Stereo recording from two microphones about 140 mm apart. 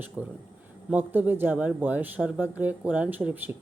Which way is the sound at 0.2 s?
10° right (ahead or behind).